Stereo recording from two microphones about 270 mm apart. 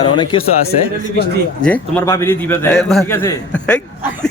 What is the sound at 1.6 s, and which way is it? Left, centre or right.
A man's voice, centre.